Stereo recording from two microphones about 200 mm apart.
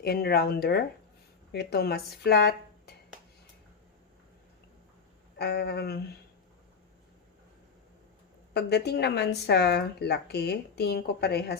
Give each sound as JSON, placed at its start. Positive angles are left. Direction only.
{"t": 0.0, "sound": "speech", "side_deg": 50}
{"t": 5.4, "sound": "speech", "side_deg": 55}
{"t": 8.5, "sound": "speech", "side_deg": 55}